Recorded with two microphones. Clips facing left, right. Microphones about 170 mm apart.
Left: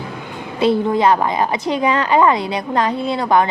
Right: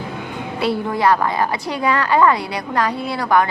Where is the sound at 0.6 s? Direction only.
20° left (ahead or behind).